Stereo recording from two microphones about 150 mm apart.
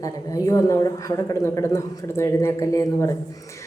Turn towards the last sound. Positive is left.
turn(degrees=20)  # may be behind; listen again after turning